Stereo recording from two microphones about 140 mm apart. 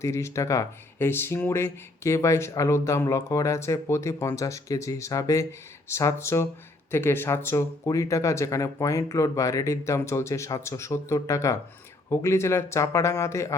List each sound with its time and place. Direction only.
0.0 s speech: 20° left (ahead or behind)